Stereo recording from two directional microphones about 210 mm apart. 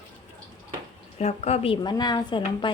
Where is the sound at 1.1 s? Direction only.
30° left (ahead or behind).